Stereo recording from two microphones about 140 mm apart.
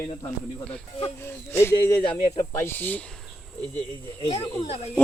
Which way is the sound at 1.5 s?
15° left (ahead or behind).